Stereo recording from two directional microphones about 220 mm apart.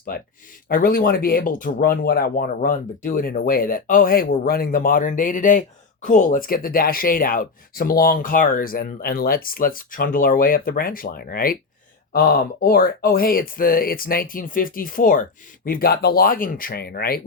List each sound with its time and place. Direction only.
0.1 s speech: 40° left (ahead or behind)
12.6 s speech: 40° left (ahead or behind)